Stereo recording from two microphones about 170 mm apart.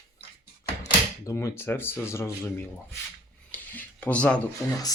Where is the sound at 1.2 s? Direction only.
15° left (ahead or behind).